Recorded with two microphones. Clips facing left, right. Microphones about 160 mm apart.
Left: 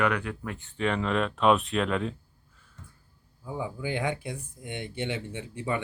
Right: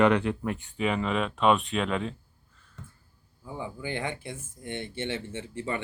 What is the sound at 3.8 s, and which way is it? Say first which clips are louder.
Speech: left 3 dB; 15° left (ahead or behind).